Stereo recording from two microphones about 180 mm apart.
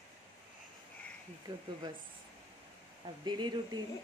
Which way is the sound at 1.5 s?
25° right (ahead or behind).